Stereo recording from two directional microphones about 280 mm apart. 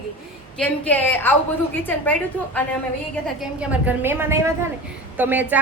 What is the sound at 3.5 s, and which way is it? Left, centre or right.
A woman's voice, centre.